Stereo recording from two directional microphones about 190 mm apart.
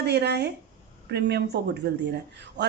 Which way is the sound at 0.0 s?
60° right (ahead or behind).